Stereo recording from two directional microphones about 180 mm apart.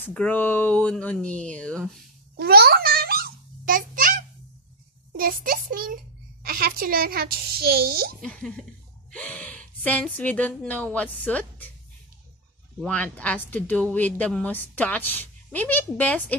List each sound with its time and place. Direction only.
0.0 s a woman's voice: 5° left (ahead or behind)
2.3 s a sound: 60° right (ahead or behind)
5.2 s a child's voice: 50° right (ahead or behind)
8.2 s a sound: 5° left (ahead or behind)
9.1 s gasp: 5° left (ahead or behind)
9.8 s a woman's voice: 10° left (ahead or behind)
12.8 s a woman's voice: 10° left (ahead or behind)